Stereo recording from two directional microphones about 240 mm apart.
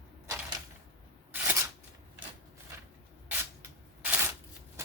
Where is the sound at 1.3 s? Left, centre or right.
Centre.